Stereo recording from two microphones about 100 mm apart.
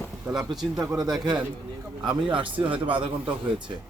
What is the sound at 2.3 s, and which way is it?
Speech, 55° right (ahead or behind).